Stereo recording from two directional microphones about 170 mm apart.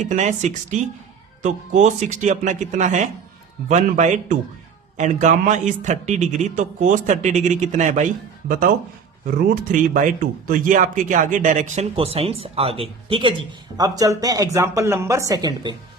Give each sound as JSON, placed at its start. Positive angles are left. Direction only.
{"t": 0.0, "sound": "speech", "side_deg": -45}
{"t": 13.7, "sound": "speech", "side_deg": -20}